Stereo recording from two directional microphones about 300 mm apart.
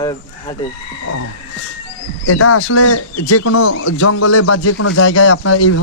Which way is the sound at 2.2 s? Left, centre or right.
Left.